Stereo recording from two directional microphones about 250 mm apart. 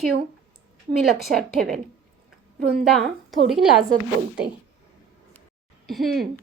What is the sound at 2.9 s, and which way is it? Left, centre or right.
Speech, centre.